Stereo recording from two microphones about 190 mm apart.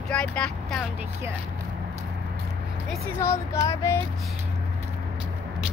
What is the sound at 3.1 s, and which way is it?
Speech, 15° left (ahead or behind).